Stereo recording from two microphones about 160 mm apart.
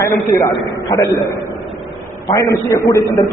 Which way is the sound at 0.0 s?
15° left (ahead or behind).